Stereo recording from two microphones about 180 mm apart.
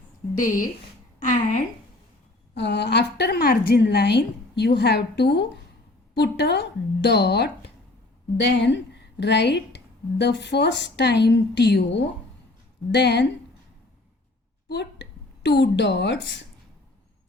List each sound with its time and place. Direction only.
0.3 s speech: 50° left (ahead or behind)
2.6 s speech: 70° left (ahead or behind)
14.7 s a sound: 70° left (ahead or behind)
15.4 s speech: 70° left (ahead or behind)